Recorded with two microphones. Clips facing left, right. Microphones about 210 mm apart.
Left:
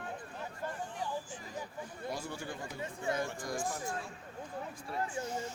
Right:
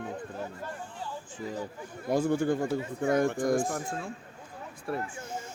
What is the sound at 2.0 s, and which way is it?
Speech, 50° right (ahead or behind).